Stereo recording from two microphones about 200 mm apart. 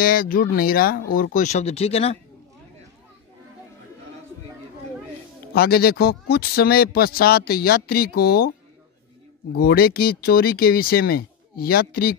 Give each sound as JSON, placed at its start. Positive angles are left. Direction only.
{"t": 0.0, "sound": "speech", "side_deg": 45}
{"t": 5.5, "sound": "speech", "side_deg": 50}
{"t": 9.5, "sound": "speech", "side_deg": 50}